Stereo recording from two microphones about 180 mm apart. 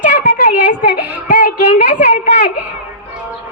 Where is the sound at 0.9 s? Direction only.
55° left (ahead or behind).